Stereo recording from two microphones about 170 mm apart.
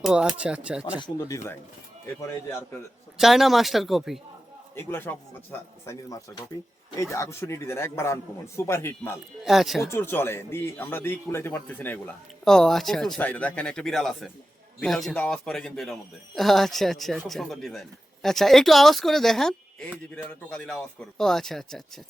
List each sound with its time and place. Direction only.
0.0 s speech: 5° right (ahead or behind)
0.9 s a man's voice: 25° left (ahead or behind)
3.2 s speech: centre (ahead or behind)
4.7 s a man's voice: 15° left (ahead or behind)
9.4 s speech: centre (ahead or behind)
9.9 s a man's voice: 15° left (ahead or behind)